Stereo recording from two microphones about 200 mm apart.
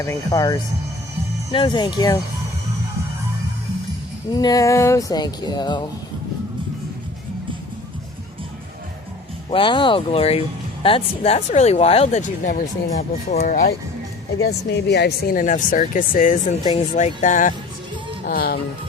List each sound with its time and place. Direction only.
0.0 s speech: 15° left (ahead or behind)
4.4 s speech: 20° left (ahead or behind)
9.5 s speech: 25° left (ahead or behind)
14.4 s speech: 55° left (ahead or behind)
18.3 s music: 50° left (ahead or behind)